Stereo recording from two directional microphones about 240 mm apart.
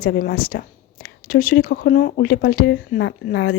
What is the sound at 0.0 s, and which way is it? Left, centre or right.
Speech, left.